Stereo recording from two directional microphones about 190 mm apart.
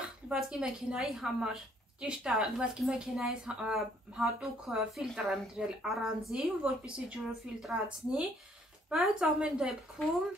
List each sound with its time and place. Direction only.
0.3 s a woman's voice: 5° right (ahead or behind)